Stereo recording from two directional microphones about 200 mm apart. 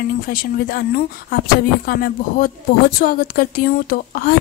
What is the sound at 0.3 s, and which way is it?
A woman's voice, 45° left (ahead or behind).